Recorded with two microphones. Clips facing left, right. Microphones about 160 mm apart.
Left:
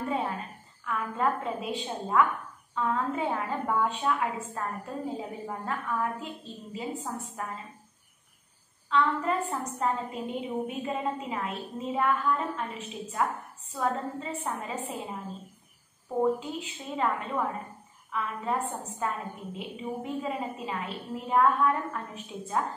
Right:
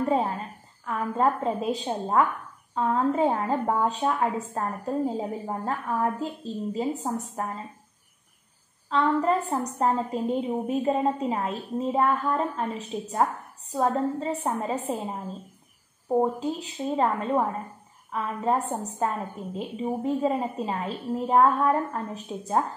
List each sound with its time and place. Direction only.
0.0 s a sound: 40° right (ahead or behind)
0.8 s a woman's voice: 35° right (ahead or behind)
8.8 s a woman's voice: 35° right (ahead or behind)
16.2 s a woman's voice: 35° right (ahead or behind)